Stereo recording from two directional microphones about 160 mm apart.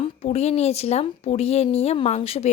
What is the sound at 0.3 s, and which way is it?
Speech, 40° left (ahead or behind).